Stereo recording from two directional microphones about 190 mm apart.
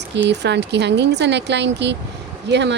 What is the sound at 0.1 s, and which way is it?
Speech, 65° right (ahead or behind).